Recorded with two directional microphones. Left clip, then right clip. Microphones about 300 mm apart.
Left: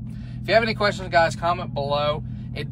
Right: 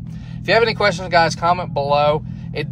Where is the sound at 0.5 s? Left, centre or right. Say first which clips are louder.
Right 5 dB; centre.